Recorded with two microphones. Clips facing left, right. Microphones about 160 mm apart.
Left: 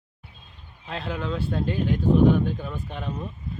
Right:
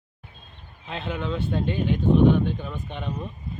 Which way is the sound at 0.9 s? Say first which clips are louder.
Even; centre (ahead or behind).